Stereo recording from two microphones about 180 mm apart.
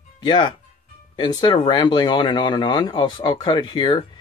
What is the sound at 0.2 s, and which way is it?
Speech, 25° left (ahead or behind).